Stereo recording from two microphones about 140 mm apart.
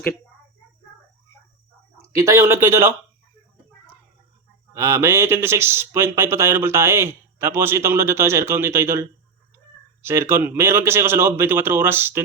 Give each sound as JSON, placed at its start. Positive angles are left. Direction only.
{"t": 2.1, "sound": "speech", "side_deg": -20}
{"t": 4.7, "sound": "speech", "side_deg": -20}